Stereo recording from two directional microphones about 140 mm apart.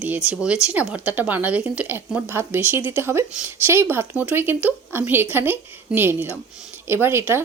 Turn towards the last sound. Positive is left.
turn(degrees=-15)  # may be behind; listen again after turning